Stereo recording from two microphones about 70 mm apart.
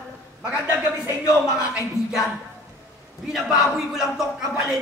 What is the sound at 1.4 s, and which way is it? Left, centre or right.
Speech, centre.